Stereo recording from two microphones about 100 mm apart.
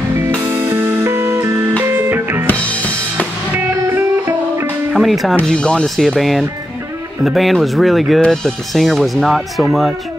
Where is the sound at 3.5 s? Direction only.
25° right (ahead or behind).